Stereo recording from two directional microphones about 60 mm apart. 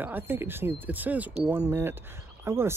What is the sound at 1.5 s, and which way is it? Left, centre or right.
Speech, right.